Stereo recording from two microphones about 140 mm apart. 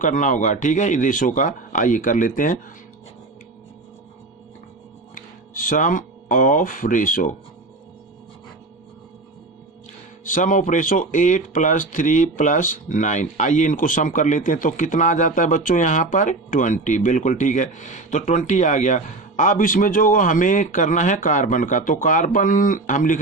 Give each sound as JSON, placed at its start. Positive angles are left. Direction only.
{"t": 0.0, "sound": "speech", "side_deg": 65}
{"t": 5.1, "sound": "speech", "side_deg": 75}
{"t": 10.2, "sound": "speech", "side_deg": 70}